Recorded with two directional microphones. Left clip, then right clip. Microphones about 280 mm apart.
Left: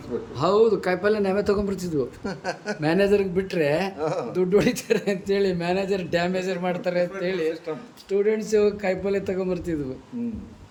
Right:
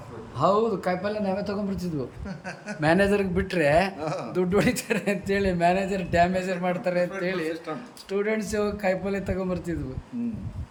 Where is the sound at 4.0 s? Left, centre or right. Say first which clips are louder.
Left 4 dB; centre.